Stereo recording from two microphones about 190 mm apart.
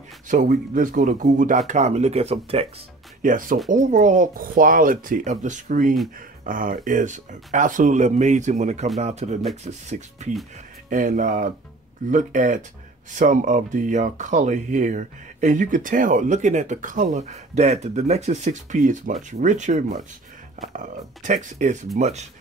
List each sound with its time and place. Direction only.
0.3 s speech: 45° right (ahead or behind)
3.2 s speech: 45° right (ahead or behind)